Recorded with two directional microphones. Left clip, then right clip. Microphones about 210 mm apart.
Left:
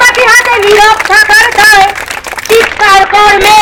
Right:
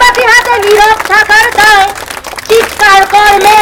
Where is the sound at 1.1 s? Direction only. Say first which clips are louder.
Left 1 dB; 15° left (ahead or behind).